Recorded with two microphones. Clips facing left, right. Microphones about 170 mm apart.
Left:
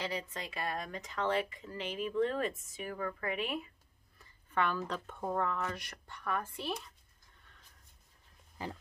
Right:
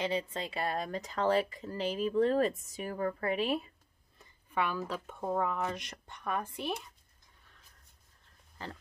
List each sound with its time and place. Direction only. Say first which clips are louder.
0.0 s speech: right 5 dB; 25° right (ahead or behind)
4.2 s speech: even; 10° right (ahead or behind)
8.6 s speech: left 2 dB; 10° left (ahead or behind)